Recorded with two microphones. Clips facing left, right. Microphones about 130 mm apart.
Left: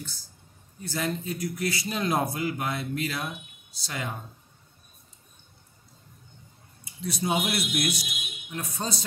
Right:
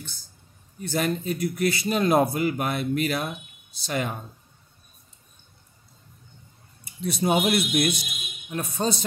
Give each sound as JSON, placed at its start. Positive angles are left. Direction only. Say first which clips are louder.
{"t": 0.8, "sound": "a man's voice", "louder": "right 5 dB", "side_deg": -60}
{"t": 7.1, "sound": "speech", "louder": "right 5 dB", "side_deg": -60}